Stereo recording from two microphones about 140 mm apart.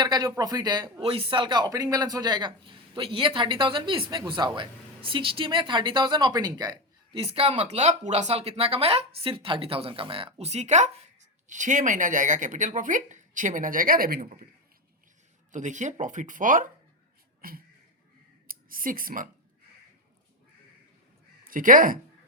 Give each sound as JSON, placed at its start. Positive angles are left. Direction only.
{"t": 0.0, "sound": "speech", "side_deg": -30}
{"t": 7.2, "sound": "speech", "side_deg": -45}
{"t": 15.5, "sound": "speech", "side_deg": -60}
{"t": 17.4, "sound": "speech", "side_deg": -90}
{"t": 21.4, "sound": "speech", "side_deg": -75}